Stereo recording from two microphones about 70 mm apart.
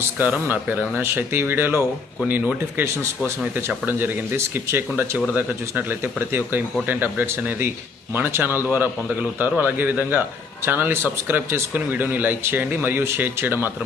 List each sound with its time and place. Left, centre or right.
0.2 s a man's voice: right
1.0 s a man's voice: right